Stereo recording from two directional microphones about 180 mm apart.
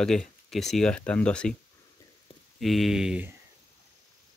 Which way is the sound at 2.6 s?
Centre (ahead or behind).